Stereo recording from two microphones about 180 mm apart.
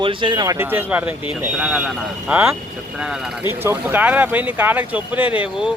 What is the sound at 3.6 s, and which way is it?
Speech, 10° right (ahead or behind).